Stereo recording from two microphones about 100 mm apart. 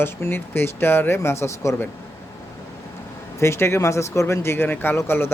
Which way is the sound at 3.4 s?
25° left (ahead or behind).